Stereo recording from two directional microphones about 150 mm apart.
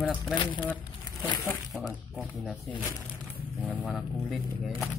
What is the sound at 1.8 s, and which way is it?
Speech, 5° right (ahead or behind).